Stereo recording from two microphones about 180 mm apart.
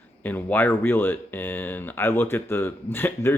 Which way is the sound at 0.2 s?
10° left (ahead or behind).